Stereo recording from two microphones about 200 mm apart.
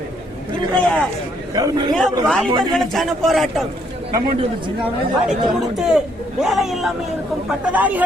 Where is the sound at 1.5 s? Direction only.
20° right (ahead or behind).